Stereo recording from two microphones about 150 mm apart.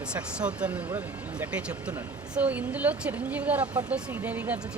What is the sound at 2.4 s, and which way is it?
Speech, 10° right (ahead or behind).